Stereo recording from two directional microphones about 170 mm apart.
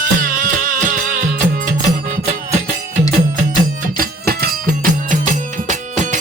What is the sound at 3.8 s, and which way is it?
Music, 60° right (ahead or behind).